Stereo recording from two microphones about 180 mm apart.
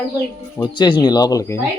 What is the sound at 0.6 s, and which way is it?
Speech, 25° left (ahead or behind).